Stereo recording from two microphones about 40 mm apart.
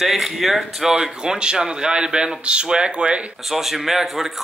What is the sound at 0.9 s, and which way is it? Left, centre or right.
A man's voice, centre.